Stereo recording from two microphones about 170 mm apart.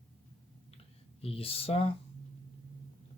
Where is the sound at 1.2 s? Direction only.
35° left (ahead or behind).